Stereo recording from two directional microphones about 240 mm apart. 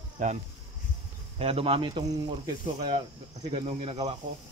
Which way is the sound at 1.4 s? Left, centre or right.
Right.